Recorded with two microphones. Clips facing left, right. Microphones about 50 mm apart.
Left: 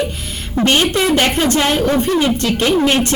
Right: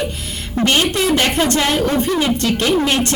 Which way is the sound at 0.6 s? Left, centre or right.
Left.